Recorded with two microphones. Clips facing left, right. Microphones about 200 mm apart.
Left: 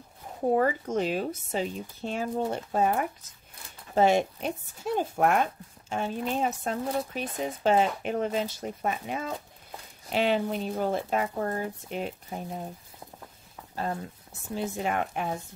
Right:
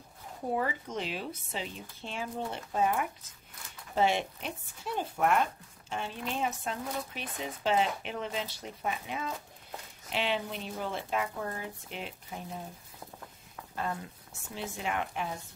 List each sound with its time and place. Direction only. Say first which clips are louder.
0.6 s speech: left 8 dB; 45° left (ahead or behind)
14.5 s speech: left 6 dB; 40° left (ahead or behind)